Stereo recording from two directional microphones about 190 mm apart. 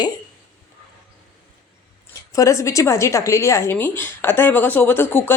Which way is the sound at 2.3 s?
15° left (ahead or behind).